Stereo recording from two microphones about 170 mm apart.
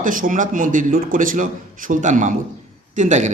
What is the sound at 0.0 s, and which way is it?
A man's voice, 55° right (ahead or behind).